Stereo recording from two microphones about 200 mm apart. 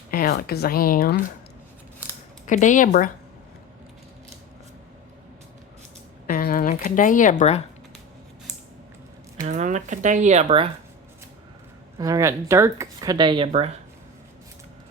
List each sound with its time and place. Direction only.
0.1 s a woman's voice: 50° left (ahead or behind)
2.5 s speech: 40° left (ahead or behind)
6.2 s a sound: 50° left (ahead or behind)
9.5 s speech: 35° right (ahead or behind)
11.9 s speech: 15° right (ahead or behind)